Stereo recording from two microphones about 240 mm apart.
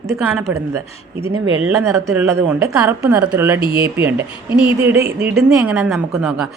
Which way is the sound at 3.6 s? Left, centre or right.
Right.